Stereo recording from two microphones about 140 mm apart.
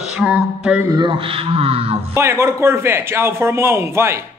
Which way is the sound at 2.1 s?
20° right (ahead or behind).